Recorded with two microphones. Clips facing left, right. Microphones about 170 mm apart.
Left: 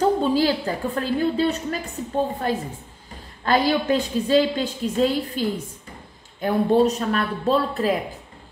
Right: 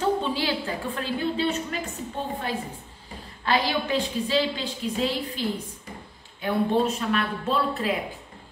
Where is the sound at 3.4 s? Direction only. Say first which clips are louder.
Left 5 dB; 45° left (ahead or behind).